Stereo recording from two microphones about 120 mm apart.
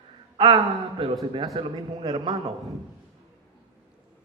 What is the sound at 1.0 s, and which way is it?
A man's voice, 40° right (ahead or behind).